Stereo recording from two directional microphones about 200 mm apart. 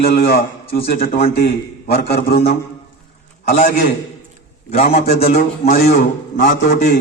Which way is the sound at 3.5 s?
40° left (ahead or behind).